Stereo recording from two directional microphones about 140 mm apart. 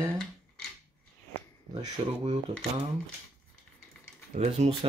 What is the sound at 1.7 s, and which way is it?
Speech, 40° right (ahead or behind).